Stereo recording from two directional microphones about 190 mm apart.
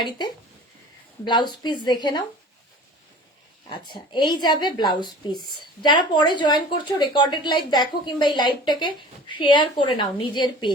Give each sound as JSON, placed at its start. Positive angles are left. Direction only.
{"t": 1.2, "sound": "speech", "side_deg": 25}
{"t": 3.7, "sound": "speech", "side_deg": 25}